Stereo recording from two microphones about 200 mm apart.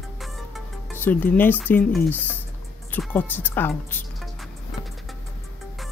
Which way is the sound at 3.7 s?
5° left (ahead or behind).